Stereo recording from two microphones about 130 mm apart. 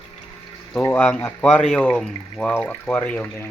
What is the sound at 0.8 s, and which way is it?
Speech, 10° left (ahead or behind).